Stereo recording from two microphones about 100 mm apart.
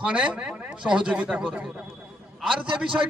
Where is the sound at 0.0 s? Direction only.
10° right (ahead or behind).